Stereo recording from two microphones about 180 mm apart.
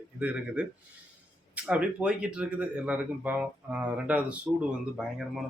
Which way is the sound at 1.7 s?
5° right (ahead or behind).